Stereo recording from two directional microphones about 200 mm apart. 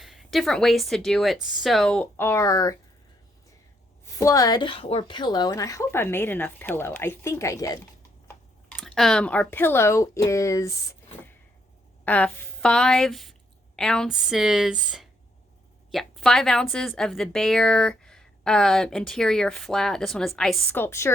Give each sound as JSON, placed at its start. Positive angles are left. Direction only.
{"t": 0.0, "sound": "a woman's voice", "side_deg": 0}
{"t": 4.0, "sound": "a woman's voice", "side_deg": 15}
{"t": 8.8, "sound": "a woman's voice", "side_deg": 0}
{"t": 12.0, "sound": "a woman's voice", "side_deg": 10}